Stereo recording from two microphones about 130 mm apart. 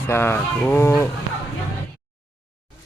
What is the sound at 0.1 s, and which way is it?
Speech, 15° left (ahead or behind).